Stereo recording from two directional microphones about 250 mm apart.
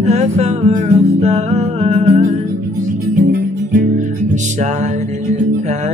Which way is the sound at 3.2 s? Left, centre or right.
Right.